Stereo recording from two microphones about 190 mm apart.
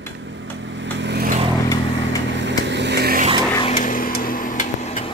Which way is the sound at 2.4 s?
70° right (ahead or behind).